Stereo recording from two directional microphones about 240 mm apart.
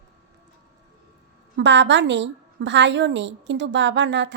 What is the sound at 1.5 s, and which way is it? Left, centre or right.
A woman's voice, right.